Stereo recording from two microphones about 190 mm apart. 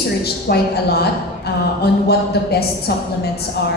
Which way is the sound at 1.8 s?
55° left (ahead or behind).